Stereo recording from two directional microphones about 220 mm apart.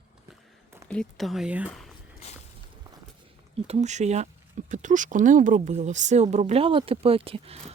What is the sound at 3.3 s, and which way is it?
Speech, 30° right (ahead or behind).